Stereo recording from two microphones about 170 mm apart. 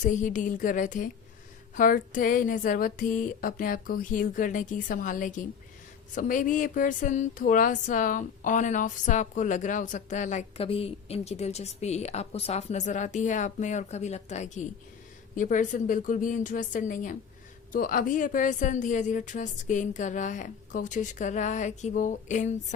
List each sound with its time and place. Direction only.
0.0 s speech: 50° left (ahead or behind)